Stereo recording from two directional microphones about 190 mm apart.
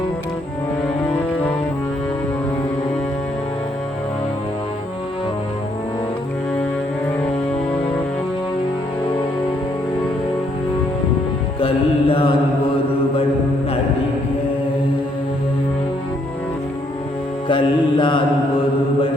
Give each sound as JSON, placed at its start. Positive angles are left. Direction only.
{"t": 11.6, "sound": "mantra", "side_deg": 30}
{"t": 17.5, "sound": "mantra", "side_deg": 25}